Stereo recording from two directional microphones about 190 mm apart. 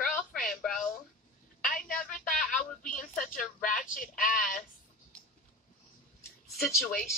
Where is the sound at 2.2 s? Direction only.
45° left (ahead or behind).